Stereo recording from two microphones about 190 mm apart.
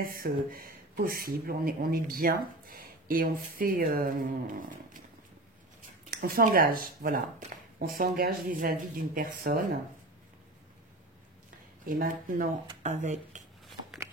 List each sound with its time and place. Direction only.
0.0 s speech: 50° right (ahead or behind)
11.9 s speech: 45° right (ahead or behind)